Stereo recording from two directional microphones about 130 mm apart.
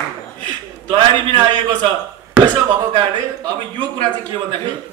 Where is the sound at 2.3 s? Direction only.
35° right (ahead or behind).